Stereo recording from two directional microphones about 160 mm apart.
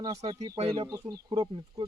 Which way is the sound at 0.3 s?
25° right (ahead or behind).